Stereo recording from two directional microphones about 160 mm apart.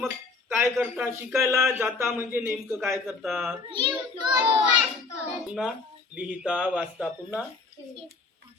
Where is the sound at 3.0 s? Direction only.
Centre (ahead or behind).